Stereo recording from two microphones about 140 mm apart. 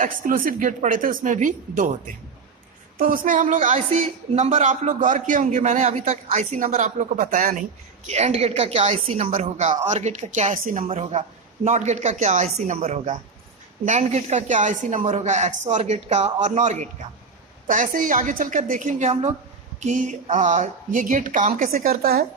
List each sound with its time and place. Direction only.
0.0 s a woman's voice: 80° right
3.0 s a woman's voice: 80° right
4.4 s a man's voice: 50° right (ahead or behind); by 7.6 s 70° right (ahead or behind)
8.0 s speech: 50° right (ahead or behind); by 10.8 s 70° right (ahead or behind)
10.8 s a man's voice: 45° right (ahead or behind)
17.7 s a man's voice: 70° right (ahead or behind); by 22.3 s 90° right